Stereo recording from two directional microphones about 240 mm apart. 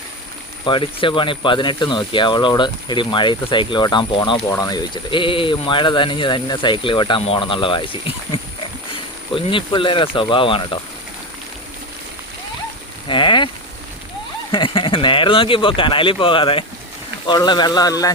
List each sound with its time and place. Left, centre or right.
0.6 s speech: centre
13.1 s speech: centre
14.5 s speech: left